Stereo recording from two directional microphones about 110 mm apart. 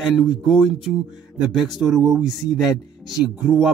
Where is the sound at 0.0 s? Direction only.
Centre (ahead or behind).